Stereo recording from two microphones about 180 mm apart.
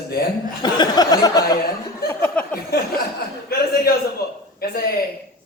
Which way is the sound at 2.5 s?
55° left (ahead or behind).